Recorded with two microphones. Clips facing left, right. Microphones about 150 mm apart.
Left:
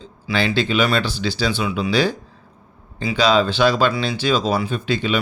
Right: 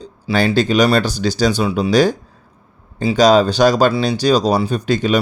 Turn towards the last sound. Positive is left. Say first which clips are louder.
# right 5 dB
turn(degrees=-45)  # may be behind; listen again after turning